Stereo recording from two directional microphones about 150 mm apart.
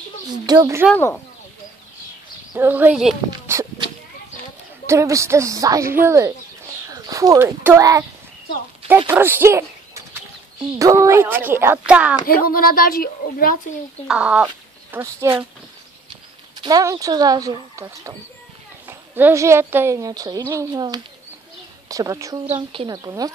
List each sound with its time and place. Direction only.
0.5 s a woman's voice: 20° right (ahead or behind)
0.9 s speech: 15° left (ahead or behind)
2.5 s speech: 15° right (ahead or behind)
3.3 s a sound: 20° right (ahead or behind)
4.8 s a woman's voice: 20° right (ahead or behind)
10.8 s speech: 20° right (ahead or behind)
12.3 s speech: 75° left (ahead or behind)
14.0 s speech: 5° right (ahead or behind)
16.6 s a woman's voice: 25° right (ahead or behind)
22.5 s a woman's voice: 35° right (ahead or behind)
22.9 s a woman's voice: 25° right (ahead or behind)